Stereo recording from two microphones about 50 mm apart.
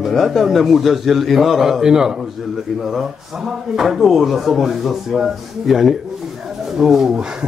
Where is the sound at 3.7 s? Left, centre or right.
Centre.